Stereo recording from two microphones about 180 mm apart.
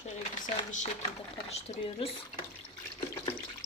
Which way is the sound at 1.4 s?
35° left (ahead or behind).